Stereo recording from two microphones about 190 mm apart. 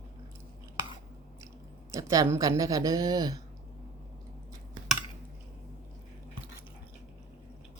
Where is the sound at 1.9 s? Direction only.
15° right (ahead or behind).